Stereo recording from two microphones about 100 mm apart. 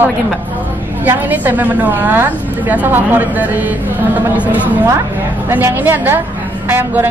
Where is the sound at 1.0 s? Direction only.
20° right (ahead or behind).